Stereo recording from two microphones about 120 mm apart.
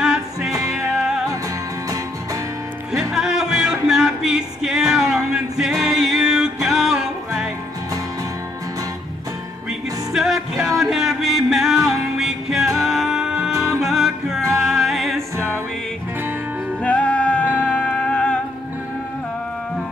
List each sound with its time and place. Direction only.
0.0 s music: 5° right (ahead or behind)
2.9 s music: 5° right (ahead or behind)
9.7 s music: 5° right (ahead or behind)
15.3 s music: 20° right (ahead or behind)
16.8 s music: 10° left (ahead or behind)